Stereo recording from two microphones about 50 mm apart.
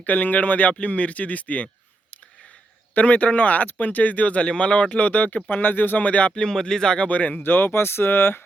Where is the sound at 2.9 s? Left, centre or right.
Left.